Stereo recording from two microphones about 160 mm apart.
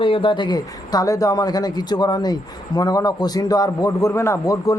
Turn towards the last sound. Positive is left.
turn(degrees=20)  # may be behind; listen again after turning